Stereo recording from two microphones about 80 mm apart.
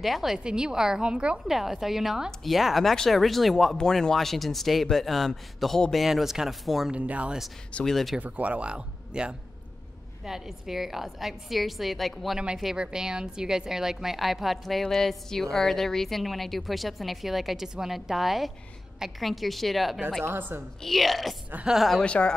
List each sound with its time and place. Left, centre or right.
0.0 s a woman's voice: centre
6.9 s a woman's voice: centre
7.7 s speech: centre
8.2 s a woman's voice: centre
20.2 s a woman's voice: right
20.8 s speech: centre
22.0 s speech: centre